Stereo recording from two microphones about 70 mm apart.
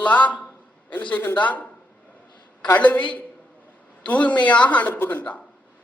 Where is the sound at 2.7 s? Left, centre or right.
Left.